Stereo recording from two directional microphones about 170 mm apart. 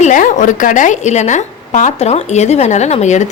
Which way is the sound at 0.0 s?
50° left (ahead or behind).